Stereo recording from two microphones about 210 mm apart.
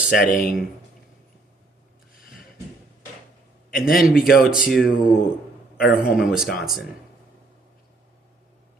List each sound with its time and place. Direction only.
0.1 s speech: 40° left (ahead or behind)
3.7 s a man's voice: 45° left (ahead or behind)
3.9 s speech: centre (ahead or behind)